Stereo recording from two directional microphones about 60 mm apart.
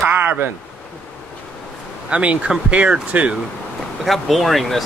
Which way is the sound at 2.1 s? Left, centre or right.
Right.